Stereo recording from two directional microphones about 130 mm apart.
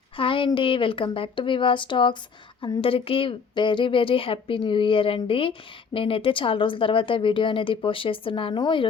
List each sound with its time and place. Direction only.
0.2 s a woman's voice: 40° left (ahead or behind)